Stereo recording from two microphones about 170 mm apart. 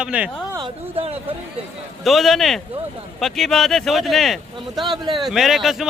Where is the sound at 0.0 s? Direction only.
10° right (ahead or behind).